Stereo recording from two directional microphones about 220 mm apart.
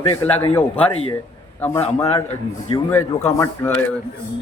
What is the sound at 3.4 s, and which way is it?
Speech, 10° left (ahead or behind).